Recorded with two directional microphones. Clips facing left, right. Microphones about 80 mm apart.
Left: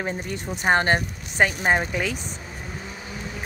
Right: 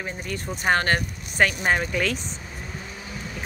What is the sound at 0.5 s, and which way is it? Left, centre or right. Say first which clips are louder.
Speech: left 2 dB; centre.